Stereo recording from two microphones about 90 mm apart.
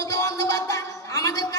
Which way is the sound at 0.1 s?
40° left (ahead or behind).